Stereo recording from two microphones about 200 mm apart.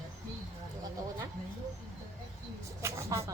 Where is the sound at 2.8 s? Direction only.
15° right (ahead or behind).